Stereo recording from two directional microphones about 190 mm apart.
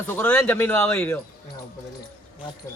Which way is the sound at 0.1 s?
10° left (ahead or behind).